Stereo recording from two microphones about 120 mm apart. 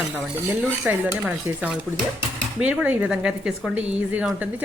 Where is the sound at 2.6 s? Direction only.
10° right (ahead or behind).